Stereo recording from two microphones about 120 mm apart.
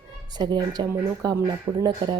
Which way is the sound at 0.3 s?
40° right (ahead or behind).